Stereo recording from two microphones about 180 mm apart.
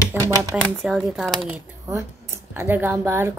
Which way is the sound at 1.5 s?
15° right (ahead or behind).